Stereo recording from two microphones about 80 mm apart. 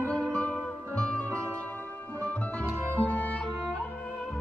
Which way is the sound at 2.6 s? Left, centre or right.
Right.